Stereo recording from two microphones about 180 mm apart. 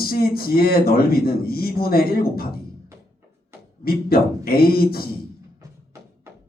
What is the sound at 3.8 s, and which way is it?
Speech, 55° left (ahead or behind).